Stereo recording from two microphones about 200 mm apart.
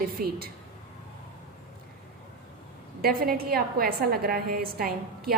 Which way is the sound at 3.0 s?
50° right (ahead or behind).